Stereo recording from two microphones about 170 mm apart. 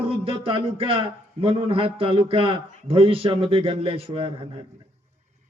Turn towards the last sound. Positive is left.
turn(degrees=-35)  # may be behind; listen again after turning